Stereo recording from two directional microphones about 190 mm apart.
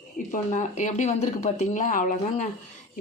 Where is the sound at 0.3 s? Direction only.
40° left (ahead or behind).